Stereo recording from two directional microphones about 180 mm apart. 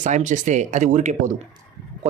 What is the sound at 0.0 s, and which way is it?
A man's voice, 45° right (ahead or behind).